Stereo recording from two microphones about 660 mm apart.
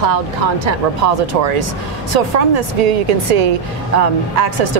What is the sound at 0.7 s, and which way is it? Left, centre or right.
Speech, right.